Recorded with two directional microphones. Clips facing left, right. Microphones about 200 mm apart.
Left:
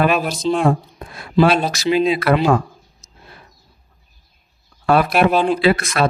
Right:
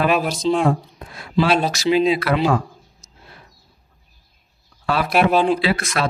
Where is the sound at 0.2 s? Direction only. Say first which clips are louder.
Even; 5° left (ahead or behind).